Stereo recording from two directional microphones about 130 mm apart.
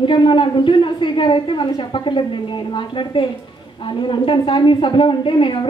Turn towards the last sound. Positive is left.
turn(degrees=40)  # may be behind; listen again after turning